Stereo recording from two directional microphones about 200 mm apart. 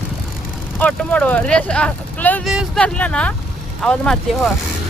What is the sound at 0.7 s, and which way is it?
Speech, 5° left (ahead or behind).